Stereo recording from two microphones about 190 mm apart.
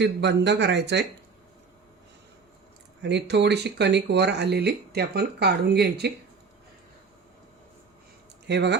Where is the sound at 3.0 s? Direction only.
65° right (ahead or behind).